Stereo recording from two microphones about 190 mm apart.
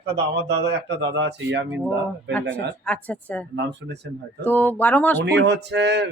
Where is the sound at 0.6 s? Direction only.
65° right (ahead or behind).